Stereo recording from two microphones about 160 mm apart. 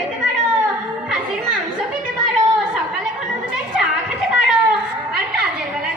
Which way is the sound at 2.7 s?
5° right (ahead or behind).